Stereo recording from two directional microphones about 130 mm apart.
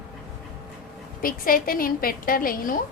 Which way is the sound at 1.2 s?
90° left.